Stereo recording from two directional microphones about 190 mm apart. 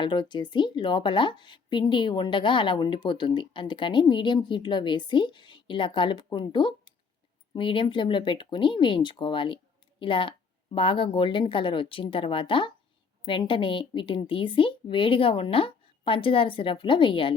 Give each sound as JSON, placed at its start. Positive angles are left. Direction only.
{"t": 0.0, "sound": "a woman's voice", "side_deg": 25}